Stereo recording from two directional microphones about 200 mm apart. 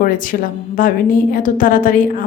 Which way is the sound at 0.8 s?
45° left (ahead or behind).